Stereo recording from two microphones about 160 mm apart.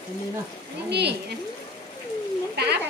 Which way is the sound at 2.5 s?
90° right.